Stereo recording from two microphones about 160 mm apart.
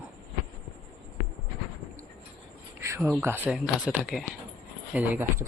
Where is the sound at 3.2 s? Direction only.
10° right (ahead or behind).